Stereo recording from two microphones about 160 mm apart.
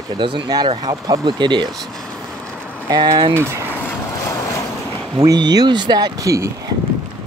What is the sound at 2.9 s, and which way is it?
Speech, 25° right (ahead or behind).